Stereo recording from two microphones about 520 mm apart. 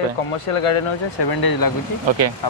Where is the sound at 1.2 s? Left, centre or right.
Left.